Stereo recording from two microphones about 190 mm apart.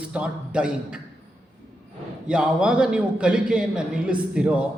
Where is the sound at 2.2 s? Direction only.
5° right (ahead or behind).